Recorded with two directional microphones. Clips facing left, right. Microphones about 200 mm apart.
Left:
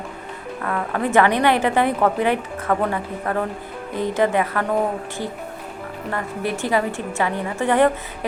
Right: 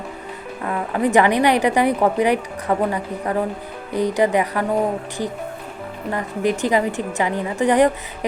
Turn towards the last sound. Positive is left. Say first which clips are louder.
# right 2 dB
turn(degrees=-15)  # may be behind; listen again after turning